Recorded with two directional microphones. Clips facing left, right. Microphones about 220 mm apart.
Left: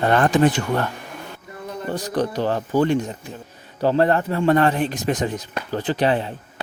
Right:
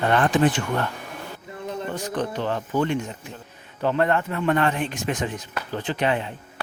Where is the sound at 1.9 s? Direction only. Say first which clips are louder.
Left 7 dB; 35° left (ahead or behind).